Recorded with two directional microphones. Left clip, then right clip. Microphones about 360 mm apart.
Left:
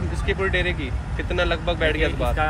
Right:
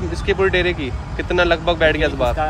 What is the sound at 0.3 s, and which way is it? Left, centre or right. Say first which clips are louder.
Speech: right 6 dB; right.